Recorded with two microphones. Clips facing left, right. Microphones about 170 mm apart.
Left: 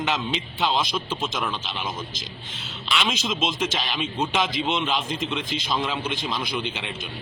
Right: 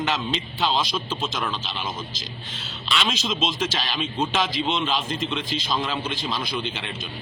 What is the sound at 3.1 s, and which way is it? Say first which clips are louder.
A man's voice: even; 20° left (ahead or behind).